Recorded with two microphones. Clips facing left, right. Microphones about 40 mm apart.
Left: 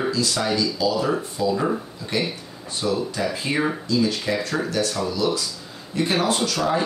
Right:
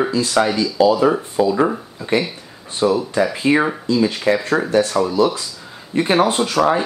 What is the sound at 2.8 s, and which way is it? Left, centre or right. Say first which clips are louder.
Speech: right 8 dB; right.